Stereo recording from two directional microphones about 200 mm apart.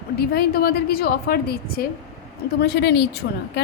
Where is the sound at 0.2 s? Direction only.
50° left (ahead or behind).